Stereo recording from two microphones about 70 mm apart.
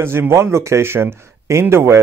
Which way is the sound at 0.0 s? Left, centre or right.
Right.